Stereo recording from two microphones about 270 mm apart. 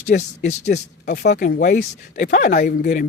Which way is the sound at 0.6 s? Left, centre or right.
Left.